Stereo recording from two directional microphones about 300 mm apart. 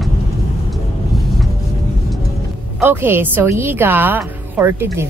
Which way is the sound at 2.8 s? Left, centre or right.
Centre.